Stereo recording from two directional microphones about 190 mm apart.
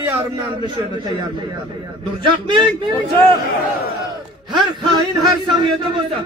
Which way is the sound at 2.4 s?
25° right (ahead or behind).